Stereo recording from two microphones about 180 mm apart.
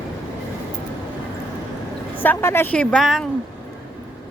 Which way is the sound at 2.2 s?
10° left (ahead or behind).